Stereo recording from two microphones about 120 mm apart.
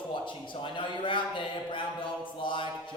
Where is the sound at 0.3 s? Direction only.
45° left (ahead or behind).